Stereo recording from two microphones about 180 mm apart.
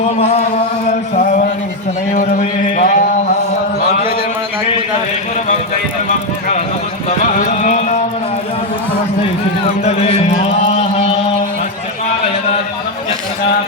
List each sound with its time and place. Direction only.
0.2 s chant: 35° left (ahead or behind)
0.9 s speech: 45° left (ahead or behind)
7.2 s carnatic music: 45° left (ahead or behind)
9.8 s chant: 35° left (ahead or behind)